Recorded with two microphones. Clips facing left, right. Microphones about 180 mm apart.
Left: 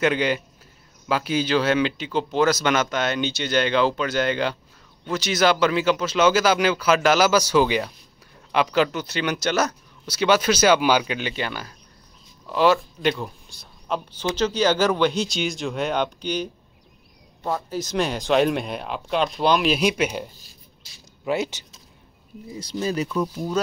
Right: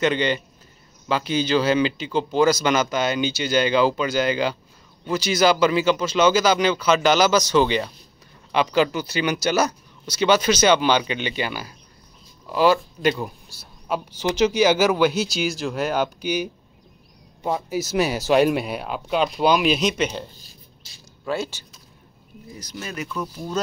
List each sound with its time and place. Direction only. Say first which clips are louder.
0.0 s speech: even; 5° left (ahead or behind)
21.3 s speech: left 2 dB; 20° left (ahead or behind)
23.0 s speech: left 4 dB; 15° left (ahead or behind)